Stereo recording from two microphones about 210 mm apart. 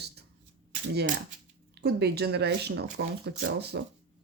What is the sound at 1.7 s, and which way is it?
Speech, 50° right (ahead or behind).